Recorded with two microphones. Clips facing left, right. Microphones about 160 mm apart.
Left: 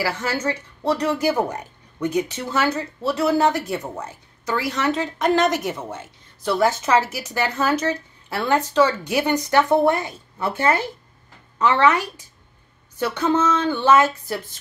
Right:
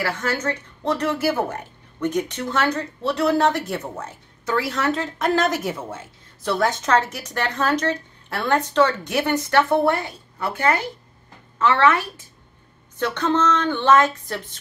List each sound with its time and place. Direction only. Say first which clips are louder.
0.0 s a woman's voice: left 1 dB; 10° left (ahead or behind)
13.0 s speech: left 1 dB; 10° left (ahead or behind)